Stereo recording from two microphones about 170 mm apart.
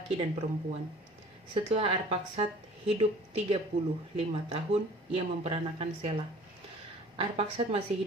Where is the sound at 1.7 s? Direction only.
35° right (ahead or behind).